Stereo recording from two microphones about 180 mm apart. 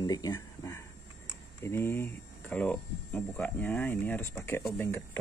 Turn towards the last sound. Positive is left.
turn(degrees=10)  # may be behind; listen again after turning